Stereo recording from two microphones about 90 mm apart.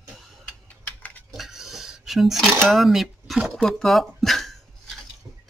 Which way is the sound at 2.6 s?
Centre (ahead or behind).